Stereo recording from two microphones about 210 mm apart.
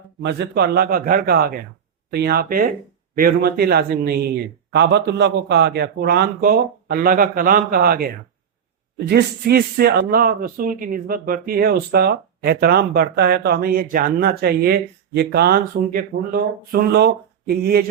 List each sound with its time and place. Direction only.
0.2 s speech: 55° right (ahead or behind)